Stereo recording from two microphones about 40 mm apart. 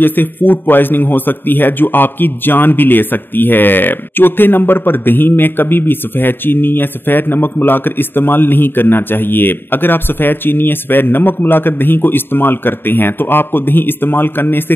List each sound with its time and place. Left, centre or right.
0.0 s a man's voice: left